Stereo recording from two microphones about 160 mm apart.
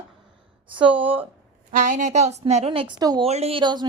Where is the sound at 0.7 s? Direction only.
30° right (ahead or behind).